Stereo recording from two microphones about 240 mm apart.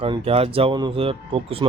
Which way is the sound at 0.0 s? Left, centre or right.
Right.